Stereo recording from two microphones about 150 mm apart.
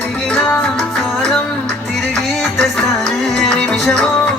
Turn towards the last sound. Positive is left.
turn(degrees=5)  # may be behind; listen again after turning